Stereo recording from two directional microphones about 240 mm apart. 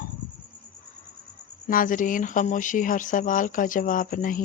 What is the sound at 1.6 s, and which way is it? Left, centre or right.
Speech, left.